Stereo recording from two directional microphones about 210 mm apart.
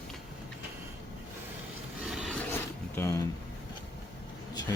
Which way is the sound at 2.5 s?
10° left (ahead or behind).